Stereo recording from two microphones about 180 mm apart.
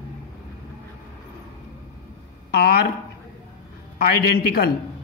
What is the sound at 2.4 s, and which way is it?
Speech, 60° left (ahead or behind).